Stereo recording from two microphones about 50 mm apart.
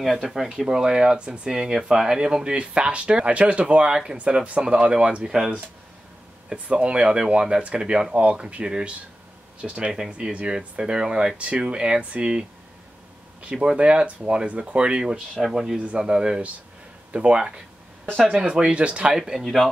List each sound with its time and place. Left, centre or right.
0.0 s speech: centre
1.5 s speech: centre
6.5 s speech: right
15.3 s speech: centre
15.8 s speech: right
19.1 s speech: centre
19.4 s speech: centre